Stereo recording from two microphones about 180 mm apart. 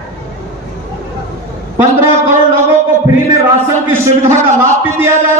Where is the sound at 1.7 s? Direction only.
15° right (ahead or behind).